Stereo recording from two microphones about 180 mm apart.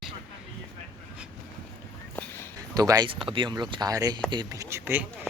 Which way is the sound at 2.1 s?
10° left (ahead or behind).